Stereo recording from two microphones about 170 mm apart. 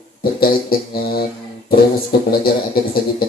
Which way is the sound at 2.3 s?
60° left (ahead or behind).